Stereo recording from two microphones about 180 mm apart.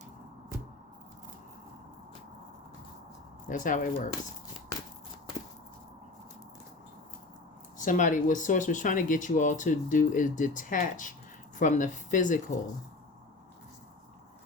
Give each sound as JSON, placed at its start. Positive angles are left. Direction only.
{"t": 3.5, "sound": "speech", "side_deg": 45}
{"t": 7.8, "sound": "speech", "side_deg": 45}